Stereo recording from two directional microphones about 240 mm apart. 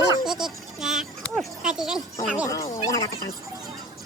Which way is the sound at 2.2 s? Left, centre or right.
Centre.